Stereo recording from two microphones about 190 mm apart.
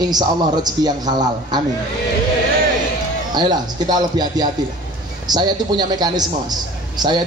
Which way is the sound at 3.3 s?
20° right (ahead or behind).